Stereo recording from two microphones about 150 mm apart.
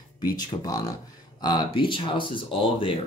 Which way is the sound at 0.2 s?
25° left (ahead or behind).